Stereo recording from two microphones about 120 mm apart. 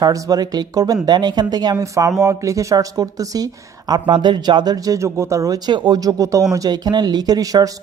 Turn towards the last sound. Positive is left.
turn(degrees=-30)  # may be behind; listen again after turning